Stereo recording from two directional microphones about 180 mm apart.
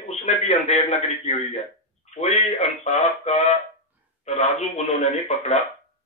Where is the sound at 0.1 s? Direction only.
35° left (ahead or behind).